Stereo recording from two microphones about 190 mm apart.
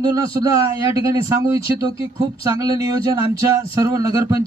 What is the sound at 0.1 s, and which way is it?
A man's voice, 15° right (ahead or behind).